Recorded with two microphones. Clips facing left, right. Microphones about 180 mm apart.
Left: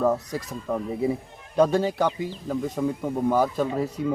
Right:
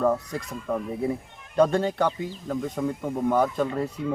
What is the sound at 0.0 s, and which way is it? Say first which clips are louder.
Speech: left 1 dB; 5° left (ahead or behind).